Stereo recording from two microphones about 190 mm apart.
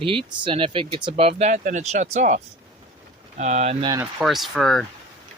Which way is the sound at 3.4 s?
35° right (ahead or behind).